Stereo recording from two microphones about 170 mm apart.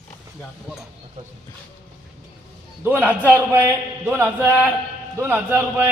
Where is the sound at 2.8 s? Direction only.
10° right (ahead or behind).